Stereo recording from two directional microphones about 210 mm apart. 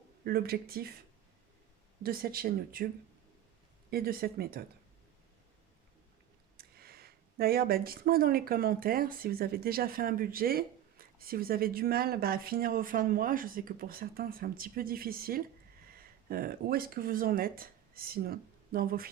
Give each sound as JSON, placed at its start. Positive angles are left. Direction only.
{"t": 0.3, "sound": "speech", "side_deg": -45}
{"t": 2.0, "sound": "speech", "side_deg": -45}
{"t": 3.8, "sound": "speech", "side_deg": -45}
{"t": 6.6, "sound": "speech", "side_deg": -45}